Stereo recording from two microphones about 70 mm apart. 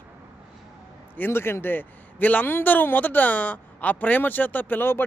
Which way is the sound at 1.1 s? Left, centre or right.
Left.